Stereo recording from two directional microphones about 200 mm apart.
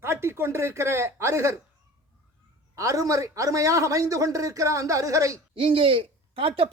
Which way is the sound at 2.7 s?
15° right (ahead or behind).